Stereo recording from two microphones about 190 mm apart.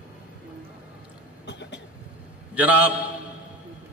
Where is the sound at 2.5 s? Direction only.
10° right (ahead or behind).